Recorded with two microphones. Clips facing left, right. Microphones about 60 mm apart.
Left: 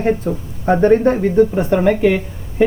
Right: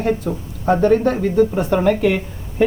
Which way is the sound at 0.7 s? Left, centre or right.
Left.